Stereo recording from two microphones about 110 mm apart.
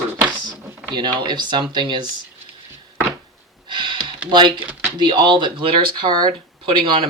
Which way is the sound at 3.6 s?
45° right (ahead or behind).